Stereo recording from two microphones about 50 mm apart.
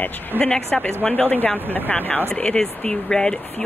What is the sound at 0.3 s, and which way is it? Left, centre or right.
Speech, right.